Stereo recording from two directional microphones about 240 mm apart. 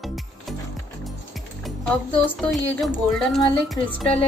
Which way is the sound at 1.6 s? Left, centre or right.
Centre.